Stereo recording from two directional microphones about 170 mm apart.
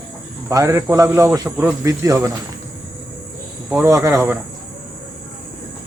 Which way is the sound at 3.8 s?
15° right (ahead or behind).